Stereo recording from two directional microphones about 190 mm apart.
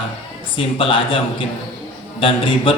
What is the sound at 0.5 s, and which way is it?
A man's voice, 30° left (ahead or behind).